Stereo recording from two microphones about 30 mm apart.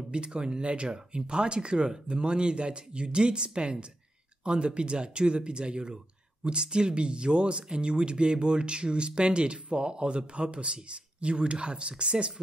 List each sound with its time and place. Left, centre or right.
0.1 s speech: right